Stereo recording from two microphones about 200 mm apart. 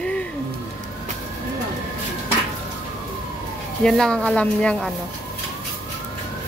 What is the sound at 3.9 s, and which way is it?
Speech, centre (ahead or behind).